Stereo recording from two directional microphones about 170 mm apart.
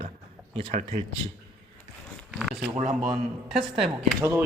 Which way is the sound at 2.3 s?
Centre (ahead or behind).